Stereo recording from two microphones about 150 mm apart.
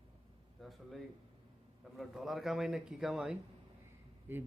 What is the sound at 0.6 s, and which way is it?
Speech, centre (ahead or behind).